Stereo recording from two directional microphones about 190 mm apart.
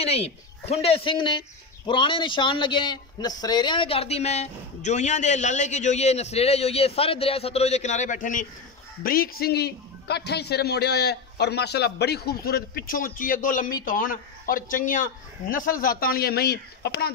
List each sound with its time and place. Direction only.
0.0 s a man's voice: 30° left (ahead or behind); by 17.1 s 60° left (ahead or behind)